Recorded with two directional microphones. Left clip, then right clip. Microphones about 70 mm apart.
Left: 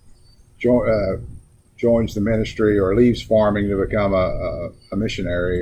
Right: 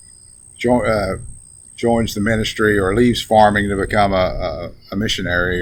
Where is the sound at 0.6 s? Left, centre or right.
Right.